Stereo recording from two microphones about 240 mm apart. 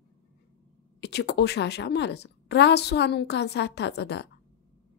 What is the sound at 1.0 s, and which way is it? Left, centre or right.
Speech, left.